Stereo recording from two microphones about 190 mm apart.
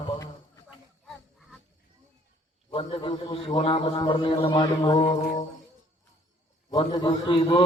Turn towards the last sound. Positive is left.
turn(degrees=25)  # may be behind; listen again after turning